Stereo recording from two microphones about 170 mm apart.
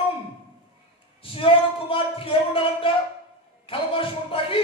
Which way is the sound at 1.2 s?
30° left (ahead or behind).